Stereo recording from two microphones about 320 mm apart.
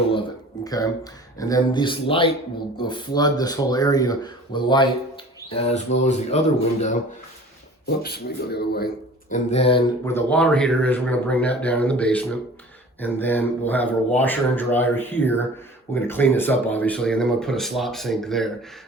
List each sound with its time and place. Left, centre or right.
0.1 s a sound: centre
1.4 s speech: centre
7.9 s speech: left
9.3 s speech: centre